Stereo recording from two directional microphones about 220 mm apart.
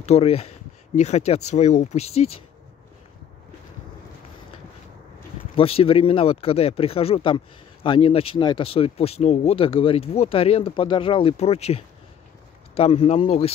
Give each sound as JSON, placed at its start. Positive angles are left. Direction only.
{"t": 0.0, "sound": "speech", "side_deg": 30}
{"t": 5.6, "sound": "speech", "side_deg": 25}